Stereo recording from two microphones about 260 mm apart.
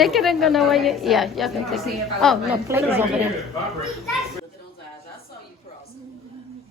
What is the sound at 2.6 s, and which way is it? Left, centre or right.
Speech, centre.